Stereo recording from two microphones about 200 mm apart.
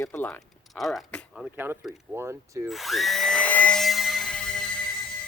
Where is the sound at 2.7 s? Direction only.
Centre (ahead or behind).